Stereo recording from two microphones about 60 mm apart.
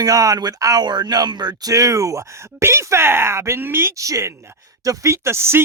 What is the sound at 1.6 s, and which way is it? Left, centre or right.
Speech, right.